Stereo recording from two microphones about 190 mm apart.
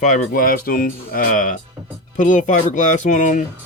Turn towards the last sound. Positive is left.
turn(degrees=40)  # may be behind; listen again after turning